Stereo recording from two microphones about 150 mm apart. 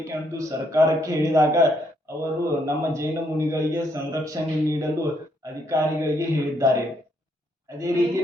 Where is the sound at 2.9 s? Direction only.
20° right (ahead or behind).